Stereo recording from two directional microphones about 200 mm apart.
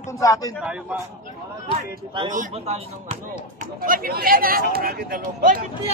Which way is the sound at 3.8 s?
45° right (ahead or behind).